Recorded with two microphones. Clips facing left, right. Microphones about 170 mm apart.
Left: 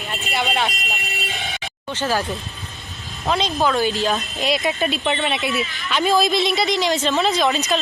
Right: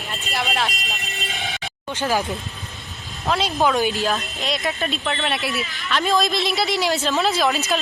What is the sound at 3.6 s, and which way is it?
Speech, 15° right (ahead or behind).